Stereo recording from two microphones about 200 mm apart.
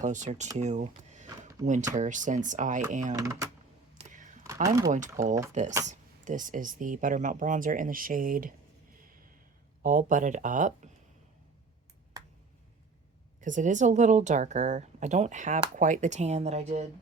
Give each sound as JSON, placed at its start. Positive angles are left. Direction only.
{"t": 0.0, "sound": "speech", "side_deg": -35}
{"t": 0.5, "sound": "a sound", "side_deg": -35}
{"t": 2.0, "sound": "speech", "side_deg": -40}
{"t": 3.1, "sound": "speech", "side_deg": -15}
{"t": 3.9, "sound": "a sound", "side_deg": -40}
{"t": 4.6, "sound": "speech", "side_deg": -15}
{"t": 4.9, "sound": "speech", "side_deg": -40}
{"t": 5.2, "sound": "speech", "side_deg": -15}
{"t": 5.9, "sound": "speech", "side_deg": -40}
{"t": 9.8, "sound": "speech", "side_deg": -40}
{"t": 13.4, "sound": "speech", "side_deg": -40}